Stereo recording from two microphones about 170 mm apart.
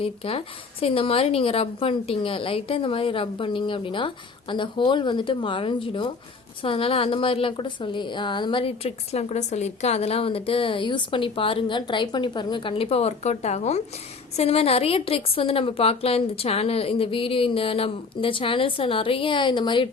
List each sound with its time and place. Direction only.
0.0 s a woman's voice: 35° left (ahead or behind)